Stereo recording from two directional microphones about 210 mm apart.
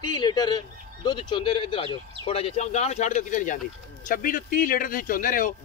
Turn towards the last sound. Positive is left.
turn(degrees=40)  # may be behind; listen again after turning